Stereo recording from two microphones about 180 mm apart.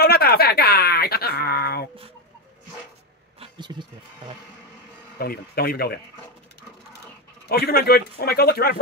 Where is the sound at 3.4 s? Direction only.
25° right (ahead or behind).